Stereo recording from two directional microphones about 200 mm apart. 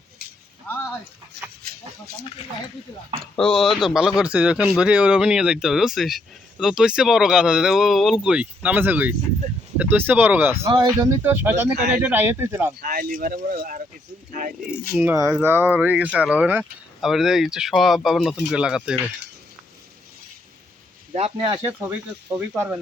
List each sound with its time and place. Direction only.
0.7 s a sound: 5° left (ahead or behind)
1.6 s livestock: 50° right (ahead or behind)
3.2 s speech: 5° left (ahead or behind)
12.8 s speech: 45° right (ahead or behind)
14.9 s speech: 10° right (ahead or behind)
21.2 s speech: 30° right (ahead or behind)
21.6 s speech: 10° right (ahead or behind)